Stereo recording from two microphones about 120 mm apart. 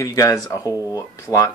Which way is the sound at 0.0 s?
30° left (ahead or behind).